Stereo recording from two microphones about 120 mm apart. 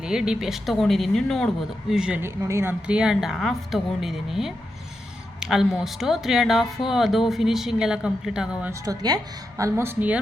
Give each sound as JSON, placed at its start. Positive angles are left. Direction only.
{"t": 0.0, "sound": "speech", "side_deg": -5}
{"t": 2.2, "sound": "a woman's voice", "side_deg": -25}
{"t": 2.8, "sound": "speech", "side_deg": -5}
{"t": 8.8, "sound": "a woman's voice", "side_deg": -30}